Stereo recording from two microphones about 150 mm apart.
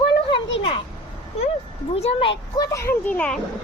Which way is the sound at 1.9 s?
40° left (ahead or behind).